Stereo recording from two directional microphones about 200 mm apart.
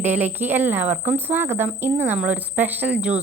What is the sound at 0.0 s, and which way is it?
Speech, 10° right (ahead or behind).